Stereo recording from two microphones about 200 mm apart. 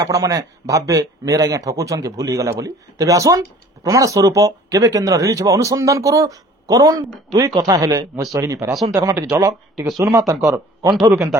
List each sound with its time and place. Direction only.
0.0 s speech: 15° right (ahead or behind)